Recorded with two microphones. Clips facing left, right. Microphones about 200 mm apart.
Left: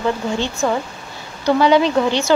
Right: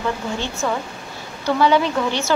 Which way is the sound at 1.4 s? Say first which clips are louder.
Left 3 dB; 15° left (ahead or behind).